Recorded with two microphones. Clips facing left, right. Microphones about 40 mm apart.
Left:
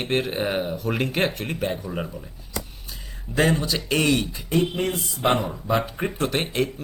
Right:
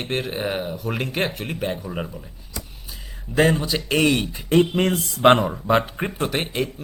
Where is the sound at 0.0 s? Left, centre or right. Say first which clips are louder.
Left 1 dB; centre.